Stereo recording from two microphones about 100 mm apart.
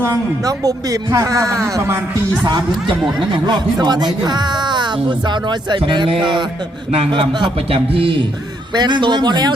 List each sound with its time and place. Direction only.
0.0 s speech: 35° right (ahead or behind)
1.6 s music: 30° right (ahead or behind)
3.3 s a man's voice: 45° right (ahead or behind); by 8.2 s 65° right (ahead or behind)
8.7 s speech: 50° right (ahead or behind)